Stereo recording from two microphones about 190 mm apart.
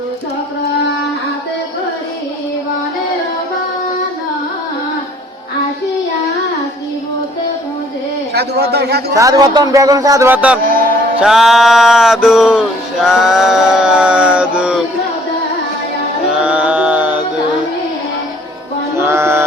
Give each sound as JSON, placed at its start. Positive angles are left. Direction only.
{"t": 8.3, "sound": "speech", "side_deg": -60}
{"t": 9.1, "sound": "speech", "side_deg": -20}
{"t": 10.6, "sound": "a sound", "side_deg": -50}
{"t": 11.2, "sound": "a sound", "side_deg": 0}
{"t": 16.3, "sound": "music", "side_deg": -5}
{"t": 18.9, "sound": "mantra", "side_deg": -15}